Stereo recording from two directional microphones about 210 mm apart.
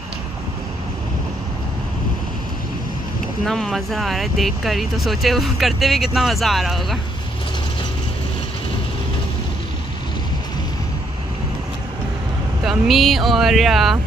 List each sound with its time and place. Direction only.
3.4 s speech: centre (ahead or behind)
12.6 s speech: centre (ahead or behind)